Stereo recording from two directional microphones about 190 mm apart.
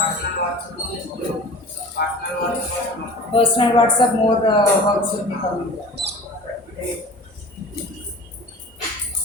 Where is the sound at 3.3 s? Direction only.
30° left (ahead or behind).